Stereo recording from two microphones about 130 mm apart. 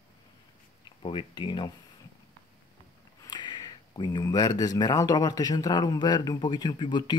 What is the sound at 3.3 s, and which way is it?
Speech, 35° left (ahead or behind).